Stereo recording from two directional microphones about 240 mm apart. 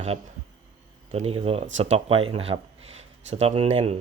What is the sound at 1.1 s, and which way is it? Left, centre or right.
Speech, right.